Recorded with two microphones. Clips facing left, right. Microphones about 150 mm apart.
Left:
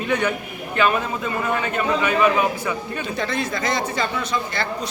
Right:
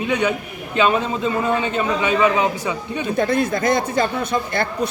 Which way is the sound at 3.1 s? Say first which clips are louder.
Right 7 dB; 50° right (ahead or behind).